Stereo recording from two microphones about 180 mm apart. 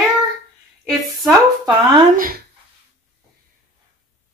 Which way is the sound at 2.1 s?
55° right (ahead or behind).